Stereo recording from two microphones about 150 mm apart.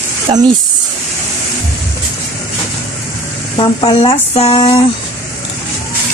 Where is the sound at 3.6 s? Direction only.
35° left (ahead or behind).